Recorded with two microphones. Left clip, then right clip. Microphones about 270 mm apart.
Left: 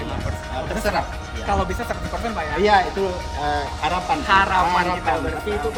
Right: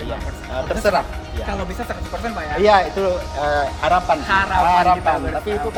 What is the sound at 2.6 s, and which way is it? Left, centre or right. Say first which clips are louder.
Speech: right 3 dB; centre.